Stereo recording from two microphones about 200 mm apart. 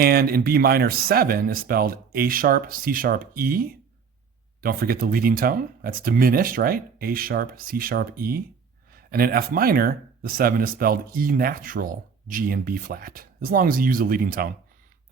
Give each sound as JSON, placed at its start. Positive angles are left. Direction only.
{"t": 0.0, "sound": "speech", "side_deg": -50}